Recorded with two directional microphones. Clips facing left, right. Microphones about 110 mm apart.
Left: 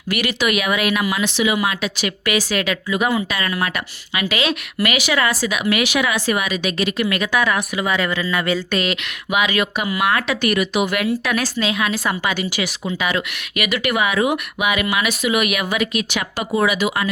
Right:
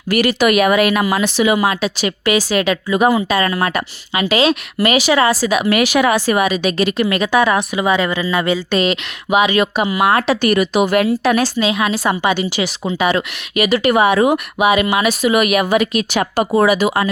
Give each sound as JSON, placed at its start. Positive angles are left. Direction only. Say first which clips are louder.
{"t": 0.1, "sound": "speech", "louder": "right 7 dB", "side_deg": -40}